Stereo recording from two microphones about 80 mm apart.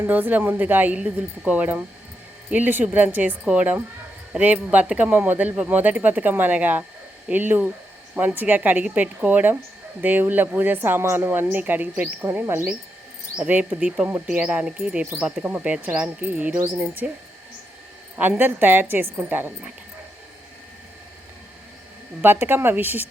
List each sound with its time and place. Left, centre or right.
0.0 s speech: right
13.3 s speech: centre
18.2 s speech: right
22.2 s speech: right